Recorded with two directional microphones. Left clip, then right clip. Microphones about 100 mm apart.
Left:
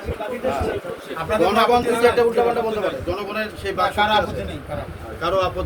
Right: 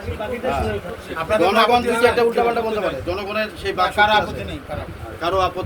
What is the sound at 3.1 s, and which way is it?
Speech, 5° left (ahead or behind).